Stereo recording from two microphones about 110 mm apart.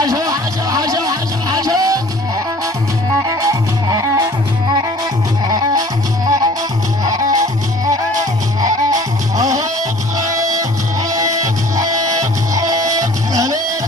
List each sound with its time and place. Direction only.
0.0 s music: 30° right (ahead or behind)
3.2 s music: 35° right (ahead or behind)
5.5 s music: 35° right (ahead or behind)
11.1 s music: 30° right (ahead or behind)